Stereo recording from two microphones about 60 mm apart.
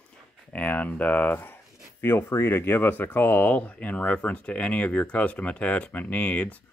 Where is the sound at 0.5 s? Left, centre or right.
Left.